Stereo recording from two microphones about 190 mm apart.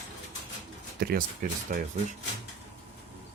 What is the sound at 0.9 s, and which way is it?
Speech, 50° right (ahead or behind).